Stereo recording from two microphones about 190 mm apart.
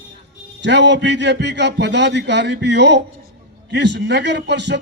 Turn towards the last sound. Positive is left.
turn(degrees=-65)  # may be behind; listen again after turning